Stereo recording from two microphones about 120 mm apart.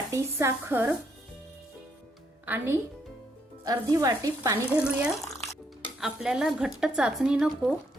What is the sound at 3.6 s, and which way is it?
Speech, 30° right (ahead or behind).